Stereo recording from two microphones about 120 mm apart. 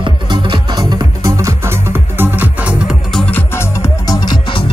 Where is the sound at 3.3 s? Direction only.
20° left (ahead or behind); by 4.6 s 40° left (ahead or behind).